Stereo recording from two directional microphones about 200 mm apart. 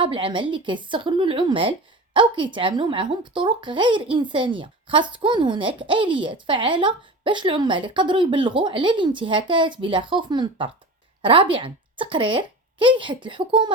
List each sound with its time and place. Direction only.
0.0 s speech: 25° right (ahead or behind)